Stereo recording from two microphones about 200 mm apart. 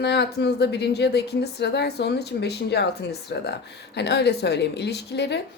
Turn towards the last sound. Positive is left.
turn(degrees=55)  # may be behind; listen again after turning